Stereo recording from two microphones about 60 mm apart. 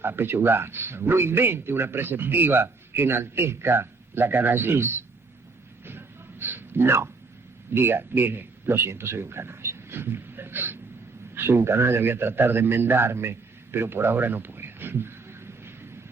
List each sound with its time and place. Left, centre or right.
0.0 s speech: right
5.8 s a sound: right
7.7 s a man's voice: right